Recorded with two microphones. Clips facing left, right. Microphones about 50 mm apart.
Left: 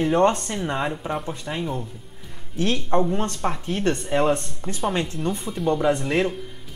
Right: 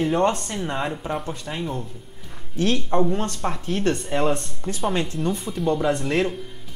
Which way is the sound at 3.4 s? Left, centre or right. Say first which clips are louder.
Even; centre.